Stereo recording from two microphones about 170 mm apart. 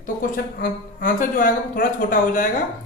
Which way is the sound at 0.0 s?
55° left (ahead or behind).